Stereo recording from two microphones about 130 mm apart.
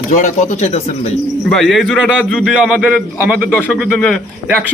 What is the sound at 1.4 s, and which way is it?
A man's voice, centre (ahead or behind).